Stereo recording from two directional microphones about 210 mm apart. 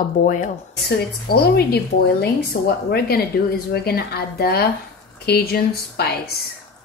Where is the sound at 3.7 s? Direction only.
50° left (ahead or behind).